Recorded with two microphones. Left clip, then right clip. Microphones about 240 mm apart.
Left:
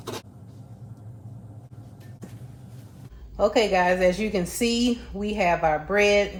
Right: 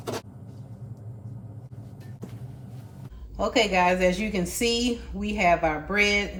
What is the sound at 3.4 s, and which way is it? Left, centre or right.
A woman's voice, left.